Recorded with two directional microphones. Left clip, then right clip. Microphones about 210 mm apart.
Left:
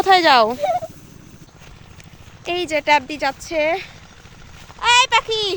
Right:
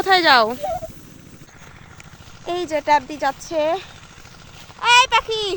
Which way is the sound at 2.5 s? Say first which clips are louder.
Left 1 dB; 5° left (ahead or behind).